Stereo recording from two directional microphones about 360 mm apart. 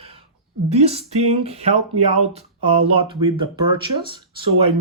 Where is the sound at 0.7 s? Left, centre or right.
Centre.